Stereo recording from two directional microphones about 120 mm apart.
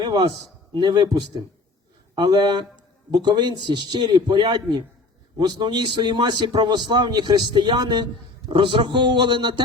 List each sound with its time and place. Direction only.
0.0 s a man's voice: 40° right (ahead or behind)